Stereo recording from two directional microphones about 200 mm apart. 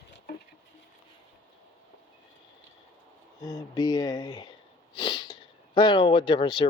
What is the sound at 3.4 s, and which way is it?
Speech, 20° left (ahead or behind).